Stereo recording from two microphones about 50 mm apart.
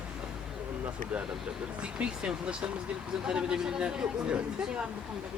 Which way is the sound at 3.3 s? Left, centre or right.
Centre.